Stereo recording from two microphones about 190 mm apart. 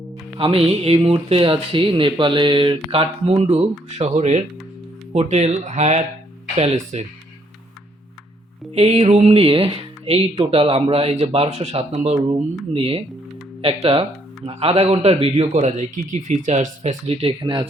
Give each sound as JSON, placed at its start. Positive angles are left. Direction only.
{"t": 0.3, "sound": "speech", "side_deg": -30}
{"t": 8.7, "sound": "speech", "side_deg": -30}